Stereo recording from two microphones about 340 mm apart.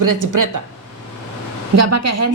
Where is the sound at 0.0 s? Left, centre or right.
Right.